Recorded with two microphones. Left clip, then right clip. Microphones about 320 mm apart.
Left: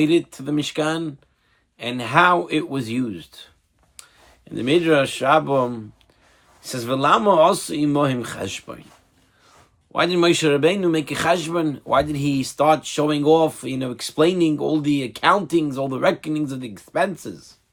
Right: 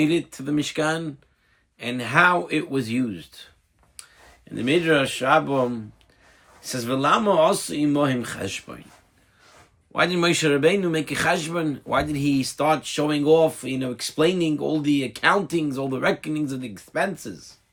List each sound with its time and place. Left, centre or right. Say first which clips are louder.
0.0 s speech: left 4 dB; centre
4.5 s speech: left 3 dB; centre
9.9 s speech: left 3 dB; centre